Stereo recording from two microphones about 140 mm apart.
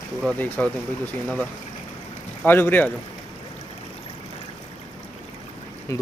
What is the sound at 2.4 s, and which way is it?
Speech, 15° left (ahead or behind).